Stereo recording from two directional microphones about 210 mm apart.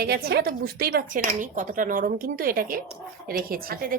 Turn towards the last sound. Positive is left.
turn(degrees=-45)  # may be behind; listen again after turning